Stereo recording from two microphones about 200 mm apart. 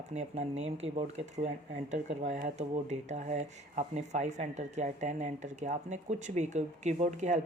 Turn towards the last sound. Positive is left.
turn(degrees=-35)  # may be behind; listen again after turning